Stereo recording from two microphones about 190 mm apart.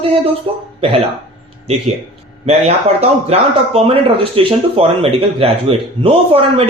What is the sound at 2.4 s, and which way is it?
A man's voice, 35° right (ahead or behind).